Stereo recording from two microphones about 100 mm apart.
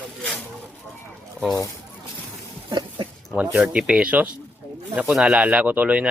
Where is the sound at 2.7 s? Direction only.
50° right (ahead or behind).